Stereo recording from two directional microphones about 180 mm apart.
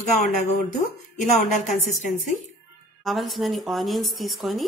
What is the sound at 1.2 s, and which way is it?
Speech, 45° left (ahead or behind).